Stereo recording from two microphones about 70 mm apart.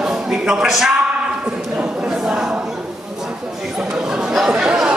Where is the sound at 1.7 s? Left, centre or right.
Centre.